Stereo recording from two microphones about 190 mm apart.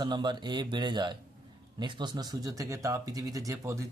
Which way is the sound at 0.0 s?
25° right (ahead or behind).